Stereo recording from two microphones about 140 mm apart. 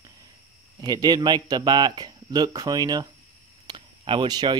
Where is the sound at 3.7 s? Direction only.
35° right (ahead or behind).